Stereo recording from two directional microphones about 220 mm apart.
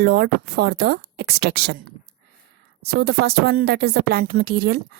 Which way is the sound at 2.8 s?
45° right (ahead or behind).